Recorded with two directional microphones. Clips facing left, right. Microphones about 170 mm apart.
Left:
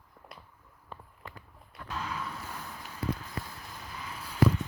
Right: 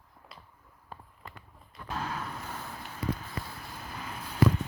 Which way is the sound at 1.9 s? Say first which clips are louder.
Right 1 dB; 50° right (ahead or behind).